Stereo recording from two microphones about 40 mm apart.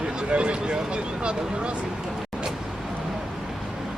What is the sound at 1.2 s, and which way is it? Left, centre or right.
Speech, right.